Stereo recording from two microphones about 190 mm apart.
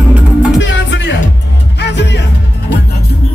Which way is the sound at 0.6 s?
75° left (ahead or behind).